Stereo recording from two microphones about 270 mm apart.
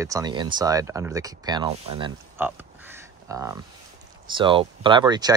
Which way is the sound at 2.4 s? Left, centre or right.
Centre.